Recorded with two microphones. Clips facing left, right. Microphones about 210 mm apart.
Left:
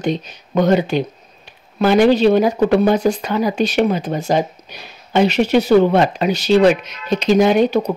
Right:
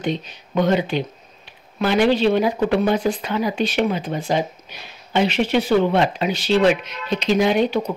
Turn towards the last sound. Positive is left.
turn(degrees=45)  # may be behind; listen again after turning